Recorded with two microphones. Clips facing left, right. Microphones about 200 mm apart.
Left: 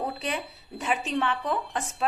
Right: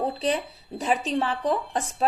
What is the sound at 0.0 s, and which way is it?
Speech, 35° right (ahead or behind).